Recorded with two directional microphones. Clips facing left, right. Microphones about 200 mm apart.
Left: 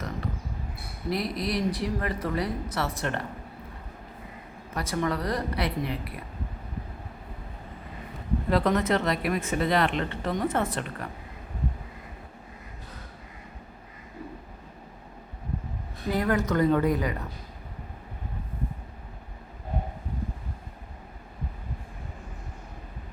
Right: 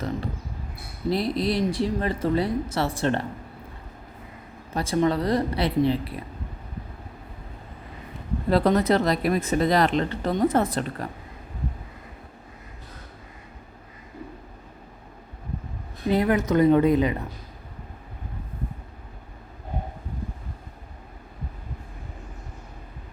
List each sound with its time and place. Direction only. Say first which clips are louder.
1.1 s speech: right 4 dB; 30° right (ahead or behind)
4.7 s speech: right 6 dB; 25° right (ahead or behind)
8.4 s speech: right 4 dB; 35° right (ahead or behind)
16.0 s speech: right 4 dB; 20° right (ahead or behind)